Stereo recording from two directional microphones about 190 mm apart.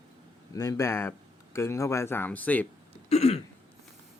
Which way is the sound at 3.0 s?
35° left (ahead or behind).